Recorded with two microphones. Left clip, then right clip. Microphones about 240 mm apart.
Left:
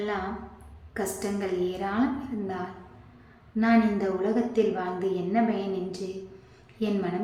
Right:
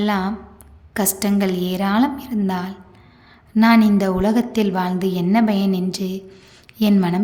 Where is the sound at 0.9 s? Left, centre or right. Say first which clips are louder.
Right 9 dB; right.